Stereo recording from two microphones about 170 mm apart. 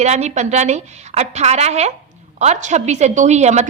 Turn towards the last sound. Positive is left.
turn(degrees=-40)  # may be behind; listen again after turning